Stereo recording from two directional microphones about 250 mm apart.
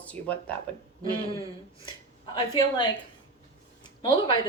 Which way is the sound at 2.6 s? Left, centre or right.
Centre.